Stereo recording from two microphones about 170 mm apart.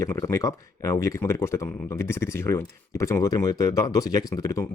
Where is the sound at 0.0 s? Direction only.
15° left (ahead or behind).